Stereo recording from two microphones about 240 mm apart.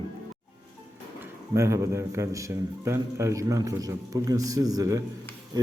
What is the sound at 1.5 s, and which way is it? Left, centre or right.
A man's voice, centre.